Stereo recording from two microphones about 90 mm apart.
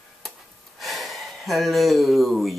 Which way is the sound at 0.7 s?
Centre (ahead or behind).